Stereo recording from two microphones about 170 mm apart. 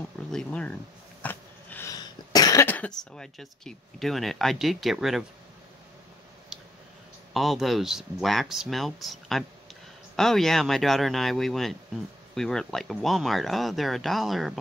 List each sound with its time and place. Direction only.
0.3 s speech: 5° left (ahead or behind)
1.2 s cough: 10° left (ahead or behind)
2.6 s speech: 10° left (ahead or behind)
6.5 s a sound: 5° right (ahead or behind)
7.3 s speech: centre (ahead or behind)